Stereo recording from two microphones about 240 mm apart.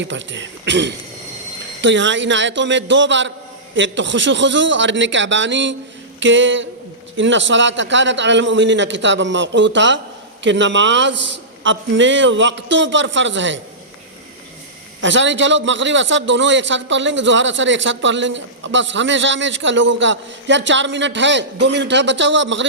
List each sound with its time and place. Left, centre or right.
0.0 s a man's voice: right
15.0 s a man's voice: right